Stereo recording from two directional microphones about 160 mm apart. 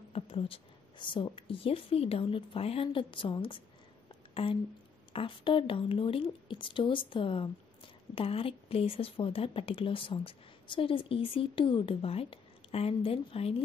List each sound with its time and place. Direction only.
0.1 s speech: 35° left (ahead or behind)
4.3 s a sound: 35° left (ahead or behind)
5.1 s speech: 30° left (ahead or behind)